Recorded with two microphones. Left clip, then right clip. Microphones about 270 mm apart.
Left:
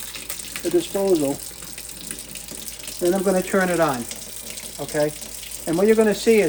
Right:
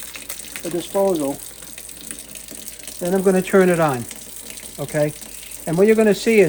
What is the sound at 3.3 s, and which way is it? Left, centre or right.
Speech, right.